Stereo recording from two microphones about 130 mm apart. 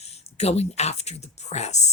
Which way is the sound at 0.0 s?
55° left (ahead or behind).